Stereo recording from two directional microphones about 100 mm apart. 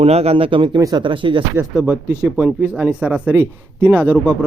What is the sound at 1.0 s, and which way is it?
Speech, 55° right (ahead or behind).